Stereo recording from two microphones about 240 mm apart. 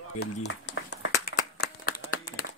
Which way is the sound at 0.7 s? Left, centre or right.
Left.